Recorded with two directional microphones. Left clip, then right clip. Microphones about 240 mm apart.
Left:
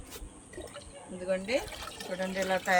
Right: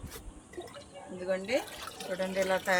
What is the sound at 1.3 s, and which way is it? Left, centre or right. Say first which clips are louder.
Speech: left 1 dB; centre.